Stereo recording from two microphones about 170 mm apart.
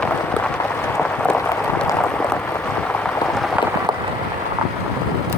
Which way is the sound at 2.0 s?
5° left (ahead or behind).